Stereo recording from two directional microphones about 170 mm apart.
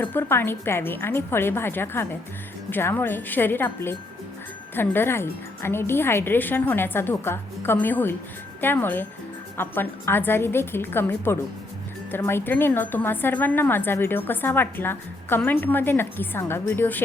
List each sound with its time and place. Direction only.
0.0 s a woman's voice: 10° left (ahead or behind)